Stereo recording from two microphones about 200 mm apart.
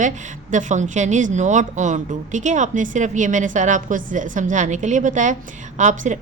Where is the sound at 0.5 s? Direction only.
35° right (ahead or behind).